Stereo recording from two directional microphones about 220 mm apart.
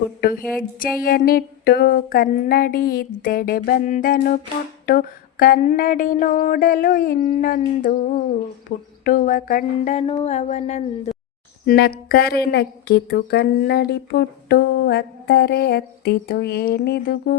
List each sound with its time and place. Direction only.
0.2 s speech: 40° left (ahead or behind)
1.0 s a sound: 40° left (ahead or behind)
11.6 s speech: 45° left (ahead or behind)